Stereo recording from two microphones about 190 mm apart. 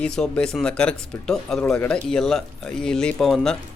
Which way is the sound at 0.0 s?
5° left (ahead or behind).